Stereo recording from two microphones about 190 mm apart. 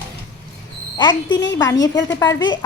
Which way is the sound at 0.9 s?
20° left (ahead or behind).